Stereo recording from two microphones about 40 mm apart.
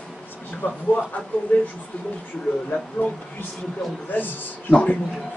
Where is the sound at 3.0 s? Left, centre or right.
Left.